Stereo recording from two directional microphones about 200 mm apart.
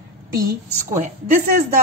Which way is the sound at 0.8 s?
40° right (ahead or behind).